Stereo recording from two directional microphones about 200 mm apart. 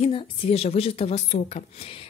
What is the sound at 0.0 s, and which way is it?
Speech, 30° left (ahead or behind).